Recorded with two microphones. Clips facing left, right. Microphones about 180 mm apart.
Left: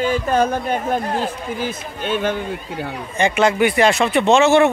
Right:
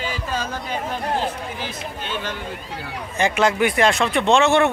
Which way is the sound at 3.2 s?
Centre (ahead or behind).